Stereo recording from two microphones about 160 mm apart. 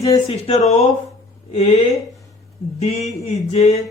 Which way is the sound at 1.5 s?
45° left (ahead or behind).